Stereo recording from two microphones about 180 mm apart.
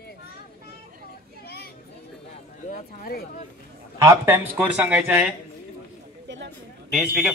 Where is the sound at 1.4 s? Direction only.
60° left (ahead or behind).